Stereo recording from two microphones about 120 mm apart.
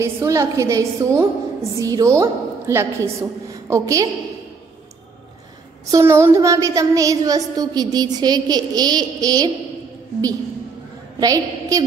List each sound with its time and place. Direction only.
0.0 s a woman's voice: 25° right (ahead or behind)
5.9 s a sound: 25° right (ahead or behind)
11.1 s a woman's voice: 30° right (ahead or behind)